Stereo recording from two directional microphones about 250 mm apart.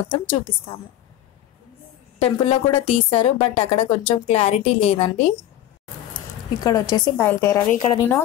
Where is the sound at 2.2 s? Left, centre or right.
Left.